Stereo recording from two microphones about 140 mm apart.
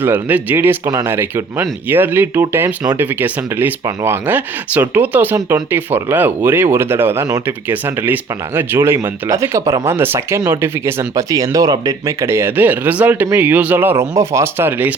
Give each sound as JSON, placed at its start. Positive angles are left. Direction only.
{"t": 0.0, "sound": "speech", "side_deg": -10}